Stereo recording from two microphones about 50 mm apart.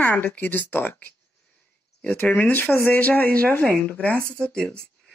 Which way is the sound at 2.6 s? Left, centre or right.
Left.